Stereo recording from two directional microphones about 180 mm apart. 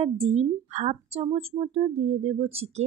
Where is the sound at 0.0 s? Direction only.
30° right (ahead or behind).